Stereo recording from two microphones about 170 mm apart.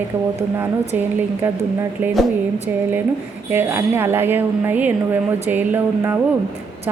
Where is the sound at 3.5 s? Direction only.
15° right (ahead or behind).